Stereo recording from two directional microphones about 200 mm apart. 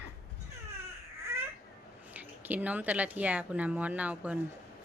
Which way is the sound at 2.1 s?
10° right (ahead or behind).